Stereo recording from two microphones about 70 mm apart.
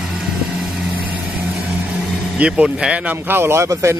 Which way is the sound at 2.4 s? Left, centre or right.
Centre.